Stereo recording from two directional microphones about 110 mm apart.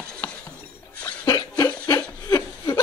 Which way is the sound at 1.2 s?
35° left (ahead or behind).